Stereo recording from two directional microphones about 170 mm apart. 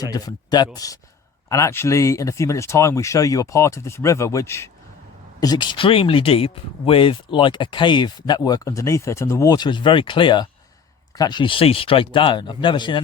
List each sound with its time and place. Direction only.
0.0 s speech: 20° left (ahead or behind)